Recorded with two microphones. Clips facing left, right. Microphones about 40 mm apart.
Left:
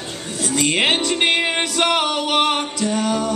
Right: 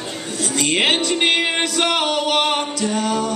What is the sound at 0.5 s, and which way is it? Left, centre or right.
Music, centre.